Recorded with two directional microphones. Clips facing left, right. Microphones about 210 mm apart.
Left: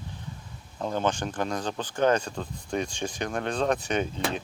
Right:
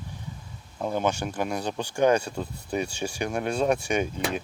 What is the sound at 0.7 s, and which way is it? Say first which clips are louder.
Speech: right 1 dB; 10° right (ahead or behind).